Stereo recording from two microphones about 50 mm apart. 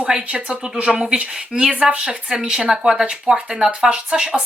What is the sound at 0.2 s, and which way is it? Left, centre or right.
Speech, right.